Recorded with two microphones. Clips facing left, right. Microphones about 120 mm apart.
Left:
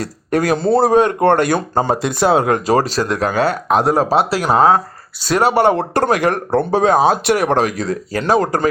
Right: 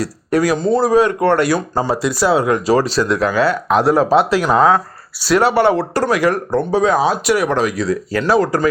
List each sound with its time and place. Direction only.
0.0 s speech: 50° left (ahead or behind)
0.5 s a man's voice: 30° left (ahead or behind)
0.8 s a man's voice: 55° left (ahead or behind)